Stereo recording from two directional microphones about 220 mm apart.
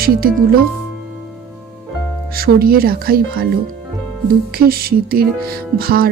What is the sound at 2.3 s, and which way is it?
Speech, 45° right (ahead or behind).